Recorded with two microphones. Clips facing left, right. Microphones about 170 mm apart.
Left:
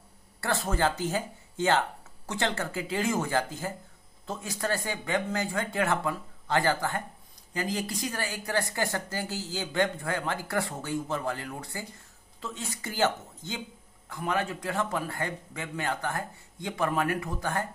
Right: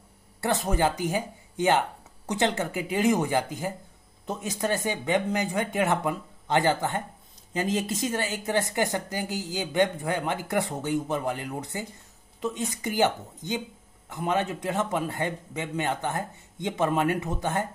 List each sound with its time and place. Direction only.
0.4 s a man's voice: 20° right (ahead or behind)